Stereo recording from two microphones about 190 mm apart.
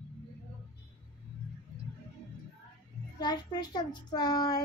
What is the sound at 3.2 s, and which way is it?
A child's voice, 20° left (ahead or behind).